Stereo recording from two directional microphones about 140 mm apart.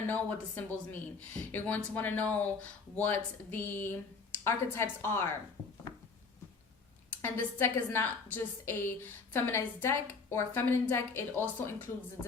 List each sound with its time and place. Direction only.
0.1 s a woman's voice: 10° left (ahead or behind)
7.1 s a woman's voice: 15° left (ahead or behind)